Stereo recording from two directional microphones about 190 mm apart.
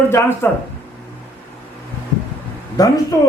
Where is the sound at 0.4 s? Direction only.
10° left (ahead or behind).